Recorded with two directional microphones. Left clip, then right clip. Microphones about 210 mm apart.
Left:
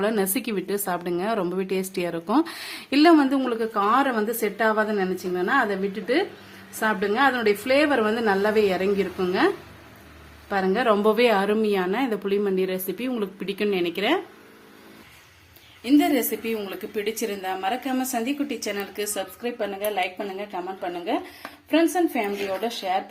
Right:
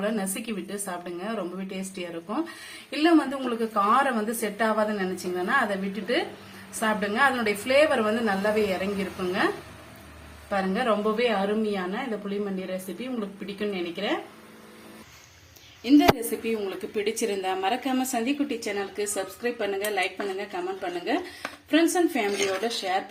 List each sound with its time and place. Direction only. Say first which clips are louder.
0.0 s a woman's voice: left 5 dB; 55° left (ahead or behind)
10.5 s a woman's voice: left 4 dB; 50° left (ahead or behind)
15.8 s a woman's voice: even; centre (ahead or behind)